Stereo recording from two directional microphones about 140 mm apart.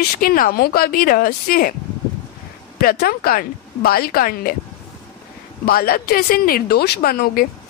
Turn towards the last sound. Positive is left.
turn(degrees=90)